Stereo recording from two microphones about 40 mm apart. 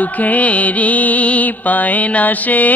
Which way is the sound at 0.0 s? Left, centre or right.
Left.